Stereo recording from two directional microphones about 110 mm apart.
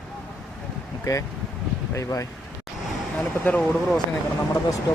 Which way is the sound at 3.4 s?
10° left (ahead or behind).